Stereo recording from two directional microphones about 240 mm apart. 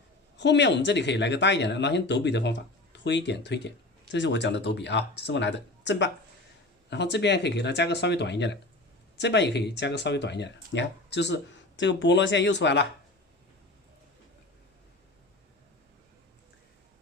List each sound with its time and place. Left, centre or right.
0.3 s speech: left